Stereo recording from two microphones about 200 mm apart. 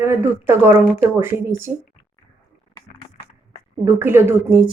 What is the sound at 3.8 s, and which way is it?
Speech, 10° right (ahead or behind).